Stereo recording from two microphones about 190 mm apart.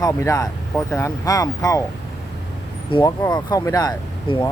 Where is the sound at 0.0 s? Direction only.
15° left (ahead or behind).